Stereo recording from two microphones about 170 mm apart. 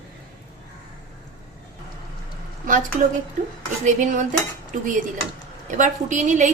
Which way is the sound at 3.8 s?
45° right (ahead or behind).